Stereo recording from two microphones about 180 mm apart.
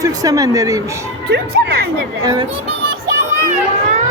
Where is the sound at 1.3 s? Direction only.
65° right (ahead or behind).